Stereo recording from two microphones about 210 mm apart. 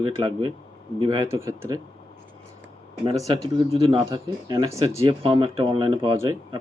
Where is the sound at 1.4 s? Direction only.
15° right (ahead or behind).